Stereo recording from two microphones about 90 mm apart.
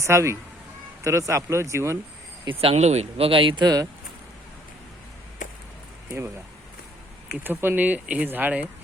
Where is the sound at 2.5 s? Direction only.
90° right; by 3.7 s 70° right (ahead or behind).